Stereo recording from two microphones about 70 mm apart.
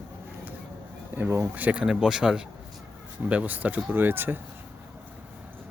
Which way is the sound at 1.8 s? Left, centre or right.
Centre.